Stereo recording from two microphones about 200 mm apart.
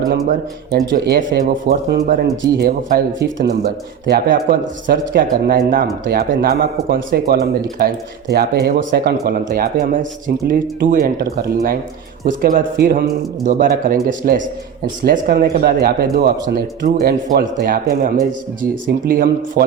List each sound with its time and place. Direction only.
0.9 s a man's voice: 55° right (ahead or behind)
2.2 s speech: 20° right (ahead or behind)
2.6 s a man's voice: 50° right (ahead or behind)